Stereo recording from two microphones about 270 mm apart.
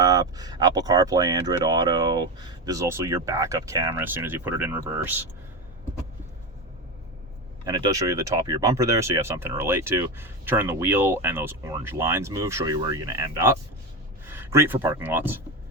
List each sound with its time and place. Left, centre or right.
0.0 s speech: centre
7.6 s speech: centre